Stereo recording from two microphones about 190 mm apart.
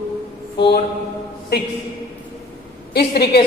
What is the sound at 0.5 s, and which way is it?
Speech, 60° left (ahead or behind).